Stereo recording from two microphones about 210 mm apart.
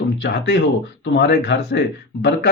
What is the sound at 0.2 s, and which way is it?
Speech, 50° left (ahead or behind).